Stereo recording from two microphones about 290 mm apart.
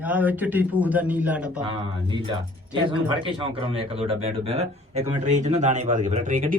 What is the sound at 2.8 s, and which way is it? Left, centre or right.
Speech, centre.